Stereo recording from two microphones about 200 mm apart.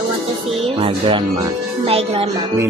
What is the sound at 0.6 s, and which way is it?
Speech, 30° right (ahead or behind).